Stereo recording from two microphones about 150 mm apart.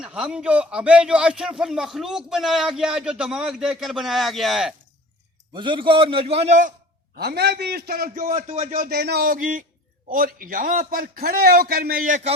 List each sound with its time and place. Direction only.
0.0 s a man's voice: 5° right (ahead or behind)
5.5 s a man's voice: 35° right (ahead or behind); by 6.7 s 55° right (ahead or behind)
7.2 s a man's voice: 90° right; by 8.6 s 60° right (ahead or behind)
8.7 s a man's voice: 80° right; by 12.3 s 60° right (ahead or behind)